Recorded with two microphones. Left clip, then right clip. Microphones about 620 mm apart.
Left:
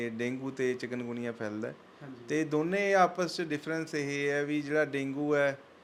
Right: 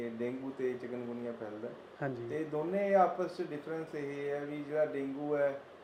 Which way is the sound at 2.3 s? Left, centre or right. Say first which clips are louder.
Left 8 dB; left.